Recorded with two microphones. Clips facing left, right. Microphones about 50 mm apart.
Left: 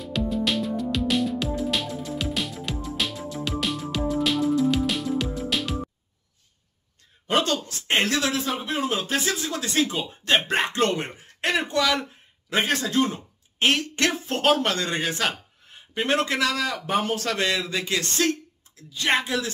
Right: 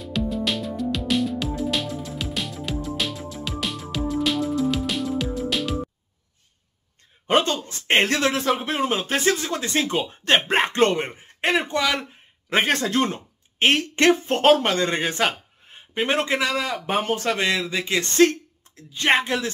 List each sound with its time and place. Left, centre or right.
0.0 s music: centre
7.2 s speech: right
8.8 s speech: right
10.9 s speech: right
12.4 s speech: right
13.6 s speech: right
15.9 s a man's voice: centre
17.4 s a man's voice: centre
18.1 s speech: right